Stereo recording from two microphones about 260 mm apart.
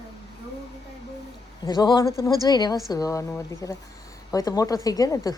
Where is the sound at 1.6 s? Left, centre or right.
Centre.